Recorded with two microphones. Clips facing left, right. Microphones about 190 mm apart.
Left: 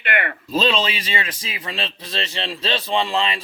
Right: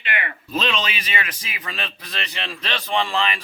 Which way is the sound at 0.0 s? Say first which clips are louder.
Left 5 dB; 55° left (ahead or behind).